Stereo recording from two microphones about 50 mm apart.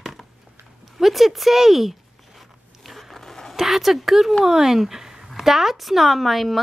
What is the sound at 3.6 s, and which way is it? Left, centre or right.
Speech, centre.